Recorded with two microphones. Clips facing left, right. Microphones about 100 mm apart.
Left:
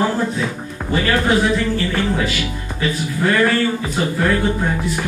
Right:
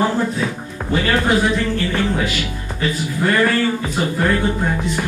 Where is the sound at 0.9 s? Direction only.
5° right (ahead or behind).